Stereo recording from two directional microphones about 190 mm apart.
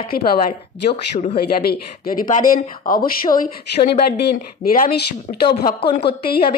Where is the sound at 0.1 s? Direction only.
50° left (ahead or behind).